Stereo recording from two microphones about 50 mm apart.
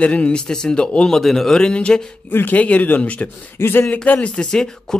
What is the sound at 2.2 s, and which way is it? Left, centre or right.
Speech, left.